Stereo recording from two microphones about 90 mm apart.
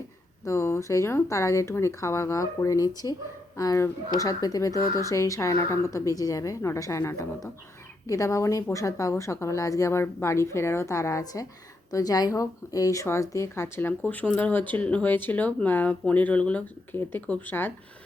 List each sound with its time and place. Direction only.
0.4 s speech: 30° left (ahead or behind)